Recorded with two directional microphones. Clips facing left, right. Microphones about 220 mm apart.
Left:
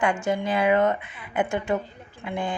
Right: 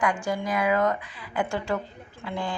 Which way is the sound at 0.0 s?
25° left (ahead or behind).